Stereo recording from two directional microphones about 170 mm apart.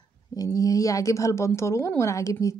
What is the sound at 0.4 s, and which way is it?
A woman's voice, 20° left (ahead or behind).